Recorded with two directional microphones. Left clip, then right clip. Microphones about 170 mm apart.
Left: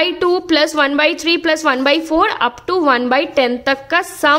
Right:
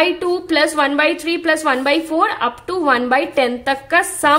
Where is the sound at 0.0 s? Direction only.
30° left (ahead or behind).